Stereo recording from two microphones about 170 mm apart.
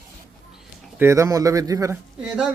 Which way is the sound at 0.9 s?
15° right (ahead or behind).